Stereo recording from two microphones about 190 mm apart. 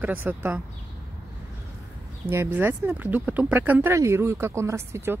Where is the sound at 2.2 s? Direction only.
10° right (ahead or behind).